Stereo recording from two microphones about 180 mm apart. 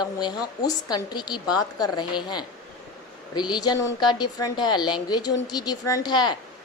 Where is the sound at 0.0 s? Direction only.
20° left (ahead or behind).